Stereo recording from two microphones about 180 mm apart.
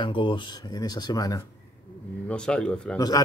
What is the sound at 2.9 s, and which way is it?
Speech, 20° left (ahead or behind).